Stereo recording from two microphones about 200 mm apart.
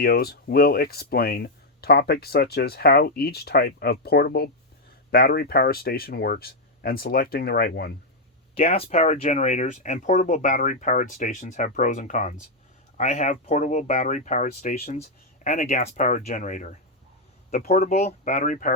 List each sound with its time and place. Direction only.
0.0 s speech: 50° left (ahead or behind)
8.5 s speech: 30° left (ahead or behind)